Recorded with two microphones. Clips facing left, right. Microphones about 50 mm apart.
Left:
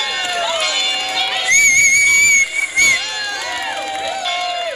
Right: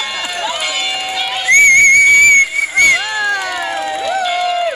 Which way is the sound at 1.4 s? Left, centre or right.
Right.